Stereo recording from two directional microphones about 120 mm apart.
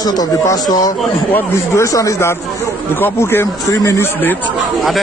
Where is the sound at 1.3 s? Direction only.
20° left (ahead or behind).